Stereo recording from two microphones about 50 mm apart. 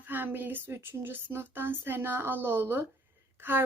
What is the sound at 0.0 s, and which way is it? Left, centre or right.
Speech, right.